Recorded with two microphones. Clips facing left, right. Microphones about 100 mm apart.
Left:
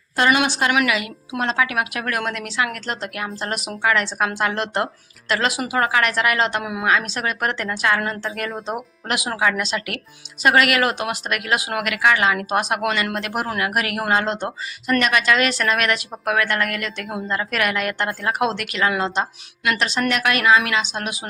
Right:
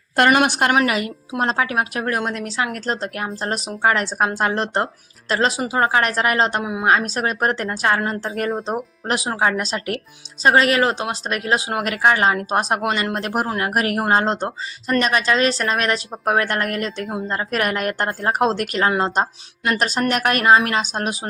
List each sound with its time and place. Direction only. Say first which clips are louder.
0.2 s a woman's voice: right 3 dB; 50° right (ahead or behind)
0.7 s speech: right 2 dB; 40° right (ahead or behind)
6.8 s speech: right 3 dB; 40° right (ahead or behind)